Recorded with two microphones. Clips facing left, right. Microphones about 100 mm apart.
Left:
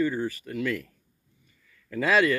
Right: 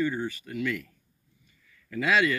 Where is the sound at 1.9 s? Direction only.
35° left (ahead or behind).